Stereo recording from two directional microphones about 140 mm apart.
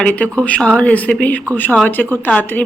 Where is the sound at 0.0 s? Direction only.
10° left (ahead or behind).